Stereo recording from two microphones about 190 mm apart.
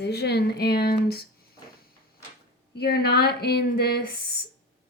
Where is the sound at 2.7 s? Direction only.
55° left (ahead or behind).